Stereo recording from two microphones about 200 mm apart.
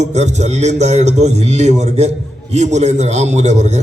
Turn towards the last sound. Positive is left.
turn(degrees=-35)  # may be behind; listen again after turning